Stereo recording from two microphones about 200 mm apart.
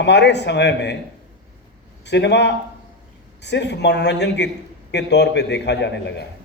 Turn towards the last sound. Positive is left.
turn(degrees=60)  # may be behind; listen again after turning